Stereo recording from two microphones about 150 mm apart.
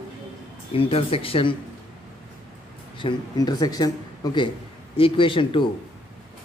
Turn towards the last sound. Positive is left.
turn(degrees=35)  # may be behind; listen again after turning